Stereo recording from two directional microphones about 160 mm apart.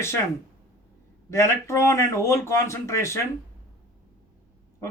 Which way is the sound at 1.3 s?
15° left (ahead or behind).